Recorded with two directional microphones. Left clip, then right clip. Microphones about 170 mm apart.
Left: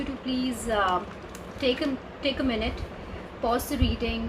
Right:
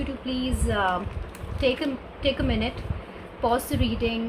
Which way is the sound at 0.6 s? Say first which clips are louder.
Even; 40° right (ahead or behind).